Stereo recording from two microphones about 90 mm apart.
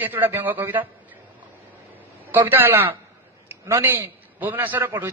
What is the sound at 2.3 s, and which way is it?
A man's voice, 20° right (ahead or behind).